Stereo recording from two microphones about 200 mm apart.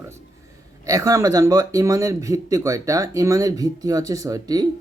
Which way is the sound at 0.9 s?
15° right (ahead or behind).